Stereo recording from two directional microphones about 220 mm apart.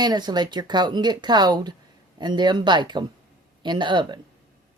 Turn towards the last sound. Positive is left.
turn(degrees=-20)  # may be behind; listen again after turning